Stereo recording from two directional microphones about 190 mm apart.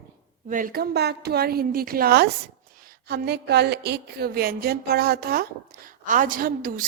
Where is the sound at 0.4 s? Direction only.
45° right (ahead or behind).